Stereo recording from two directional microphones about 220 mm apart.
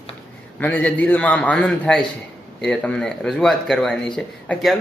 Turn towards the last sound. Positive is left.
turn(degrees=5)  # may be behind; listen again after turning